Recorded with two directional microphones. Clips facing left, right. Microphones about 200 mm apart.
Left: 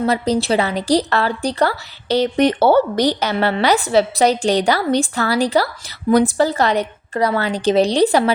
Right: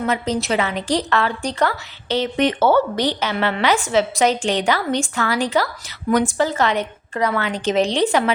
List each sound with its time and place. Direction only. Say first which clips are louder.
0.0 s a woman's voice: left 4 dB; 35° left (ahead or behind)